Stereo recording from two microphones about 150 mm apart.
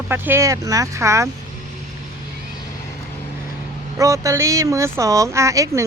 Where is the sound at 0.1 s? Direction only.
15° right (ahead or behind).